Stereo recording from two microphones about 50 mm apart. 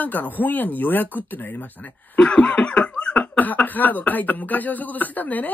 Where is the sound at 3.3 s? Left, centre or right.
Left.